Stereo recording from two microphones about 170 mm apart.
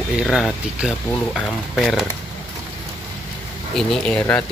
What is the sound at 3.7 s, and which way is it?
Speech, centre (ahead or behind).